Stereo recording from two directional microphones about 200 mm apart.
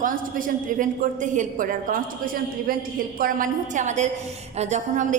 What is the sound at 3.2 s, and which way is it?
A woman's voice, 45° right (ahead or behind).